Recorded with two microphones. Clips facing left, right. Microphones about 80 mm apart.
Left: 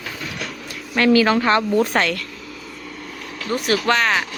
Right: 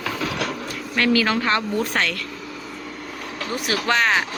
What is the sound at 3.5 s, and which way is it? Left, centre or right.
Speech, centre.